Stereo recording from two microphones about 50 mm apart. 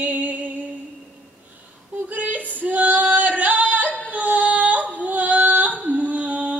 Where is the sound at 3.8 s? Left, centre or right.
Left.